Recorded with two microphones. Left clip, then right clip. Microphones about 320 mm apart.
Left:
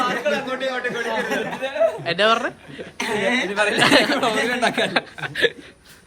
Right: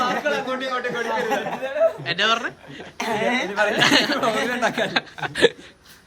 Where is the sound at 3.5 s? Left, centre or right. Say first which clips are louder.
Left 2 dB; centre.